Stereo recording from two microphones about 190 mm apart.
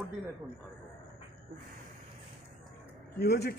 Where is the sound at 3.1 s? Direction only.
60° left (ahead or behind).